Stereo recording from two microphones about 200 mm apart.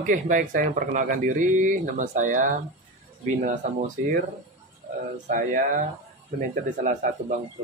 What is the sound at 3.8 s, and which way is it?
Speech, 40° right (ahead or behind).